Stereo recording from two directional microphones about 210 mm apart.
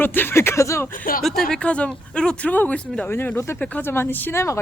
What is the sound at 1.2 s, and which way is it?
Speech, centre (ahead or behind).